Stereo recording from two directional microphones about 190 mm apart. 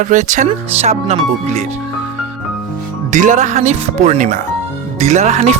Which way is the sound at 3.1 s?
40° right (ahead or behind).